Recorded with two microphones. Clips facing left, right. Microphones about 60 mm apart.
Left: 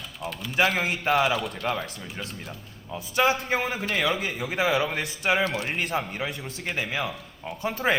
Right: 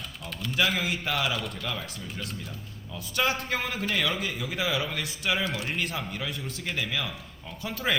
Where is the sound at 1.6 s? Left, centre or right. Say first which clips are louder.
Left 6 dB; left.